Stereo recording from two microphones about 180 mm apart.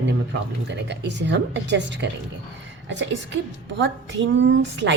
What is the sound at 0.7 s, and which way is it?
A woman's voice, 75° right (ahead or behind).